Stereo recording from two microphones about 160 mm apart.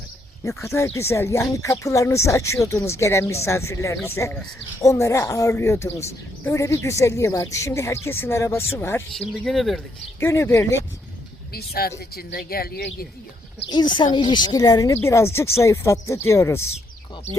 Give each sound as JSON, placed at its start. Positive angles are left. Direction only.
{"t": 0.4, "sound": "speech", "side_deg": 20}
{"t": 9.4, "sound": "speech", "side_deg": 0}
{"t": 10.2, "sound": "speech", "side_deg": 15}
{"t": 11.5, "sound": "speech", "side_deg": 75}
{"t": 13.7, "sound": "speech", "side_deg": 30}